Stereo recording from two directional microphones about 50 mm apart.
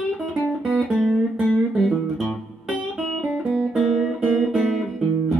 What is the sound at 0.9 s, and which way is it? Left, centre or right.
Music, centre.